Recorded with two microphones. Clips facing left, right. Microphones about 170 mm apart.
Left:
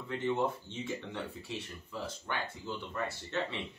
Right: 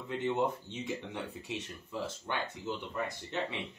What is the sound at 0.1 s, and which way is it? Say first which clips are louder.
Speech: right 1 dB; 15° right (ahead or behind).